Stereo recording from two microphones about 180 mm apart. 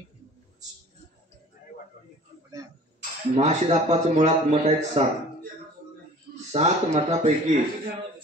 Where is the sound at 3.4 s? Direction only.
40° right (ahead or behind).